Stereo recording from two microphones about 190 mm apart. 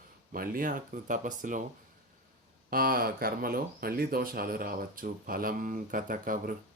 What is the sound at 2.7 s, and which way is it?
Speech, 50° right (ahead or behind).